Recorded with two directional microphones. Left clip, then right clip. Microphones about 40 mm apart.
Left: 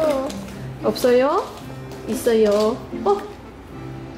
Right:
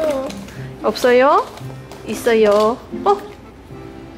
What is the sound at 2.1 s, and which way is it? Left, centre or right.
Speech, right.